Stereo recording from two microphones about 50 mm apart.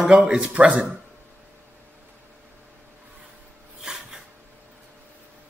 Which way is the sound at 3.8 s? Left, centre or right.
Centre.